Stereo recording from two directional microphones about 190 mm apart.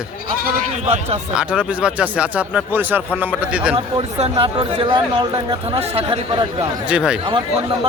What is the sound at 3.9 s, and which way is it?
Speech, 30° right (ahead or behind).